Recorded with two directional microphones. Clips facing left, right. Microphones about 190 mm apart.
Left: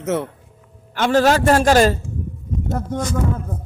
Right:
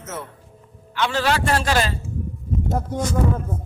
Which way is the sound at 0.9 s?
45° left (ahead or behind).